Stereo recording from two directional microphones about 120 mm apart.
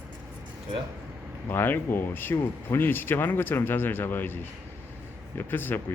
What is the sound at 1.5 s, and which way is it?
Speech, 20° left (ahead or behind).